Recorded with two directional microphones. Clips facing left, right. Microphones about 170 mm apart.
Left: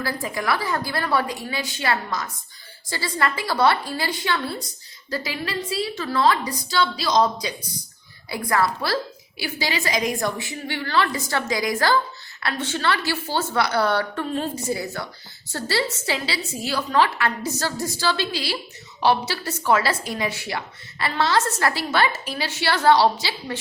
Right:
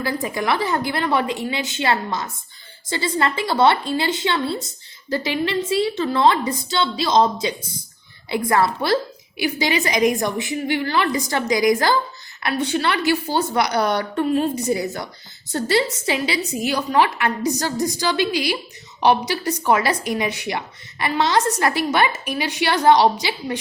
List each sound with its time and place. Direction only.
0.0 s a woman's voice: 20° right (ahead or behind)